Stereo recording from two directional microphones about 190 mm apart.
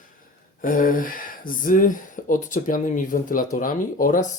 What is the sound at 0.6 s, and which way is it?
Speech, 45° left (ahead or behind).